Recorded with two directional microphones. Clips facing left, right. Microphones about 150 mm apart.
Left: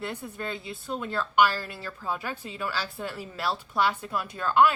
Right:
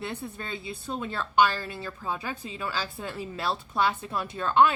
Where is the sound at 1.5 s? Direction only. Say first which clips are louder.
Right 1 dB; 20° right (ahead or behind).